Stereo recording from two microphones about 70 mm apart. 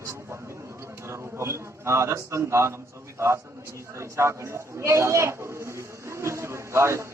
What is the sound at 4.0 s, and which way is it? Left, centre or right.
A man's voice, right.